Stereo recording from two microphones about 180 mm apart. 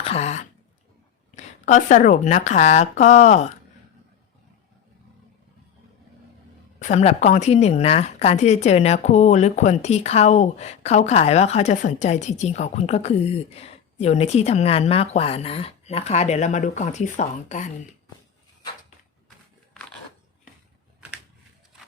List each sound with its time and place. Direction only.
0.0 s speech: 35° left (ahead or behind)
6.7 s speech: 40° left (ahead or behind)